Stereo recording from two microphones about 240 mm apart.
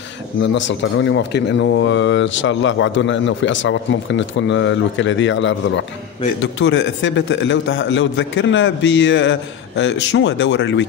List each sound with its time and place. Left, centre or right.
0.4 s speech: left